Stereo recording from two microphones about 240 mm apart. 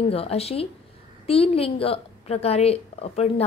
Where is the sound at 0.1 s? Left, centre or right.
Left.